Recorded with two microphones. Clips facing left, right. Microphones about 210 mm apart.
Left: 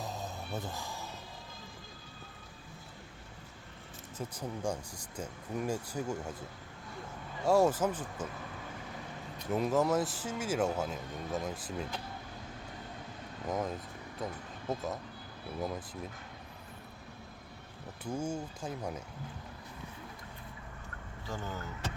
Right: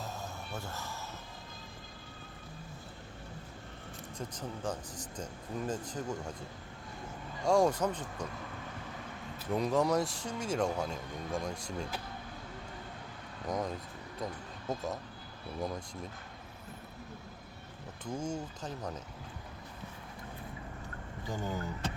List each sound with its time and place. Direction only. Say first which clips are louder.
0.0 s music: left 2 dB; 15° left (ahead or behind)
4.2 s speech: left 2 dB; 10° left (ahead or behind)
7.4 s speech: left 1 dB; 5° left (ahead or behind)
9.4 s speech: even; 5° left (ahead or behind)
13.5 s speech: even; 5° left (ahead or behind)
18.0 s speech: left 1 dB; 10° left (ahead or behind)
21.2 s speech: right 3 dB; 15° right (ahead or behind)